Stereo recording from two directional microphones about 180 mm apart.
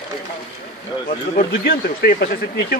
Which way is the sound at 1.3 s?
50° left (ahead or behind).